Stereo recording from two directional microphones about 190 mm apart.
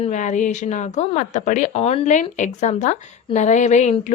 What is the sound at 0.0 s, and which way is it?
Speech, 40° left (ahead or behind).